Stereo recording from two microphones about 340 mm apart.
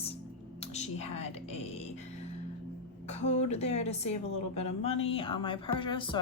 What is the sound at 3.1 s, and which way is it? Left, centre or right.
A woman's voice, centre.